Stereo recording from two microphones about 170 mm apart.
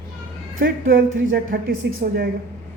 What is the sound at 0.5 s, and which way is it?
A woman's voice, 55° right (ahead or behind).